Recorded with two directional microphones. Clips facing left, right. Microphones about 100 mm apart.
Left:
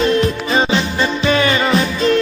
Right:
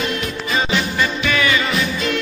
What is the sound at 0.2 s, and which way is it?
Music, 35° left (ahead or behind).